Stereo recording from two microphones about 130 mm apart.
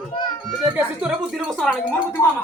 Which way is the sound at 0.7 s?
10° right (ahead or behind).